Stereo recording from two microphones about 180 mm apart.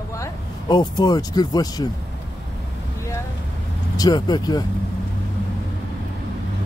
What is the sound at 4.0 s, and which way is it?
Speech, 20° left (ahead or behind).